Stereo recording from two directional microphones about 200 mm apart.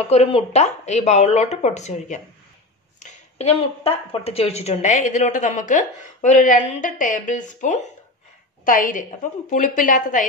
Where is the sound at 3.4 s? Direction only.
30° left (ahead or behind).